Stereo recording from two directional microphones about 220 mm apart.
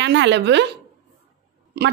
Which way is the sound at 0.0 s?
50° right (ahead or behind).